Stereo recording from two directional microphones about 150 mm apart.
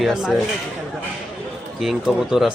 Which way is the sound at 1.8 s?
Centre (ahead or behind).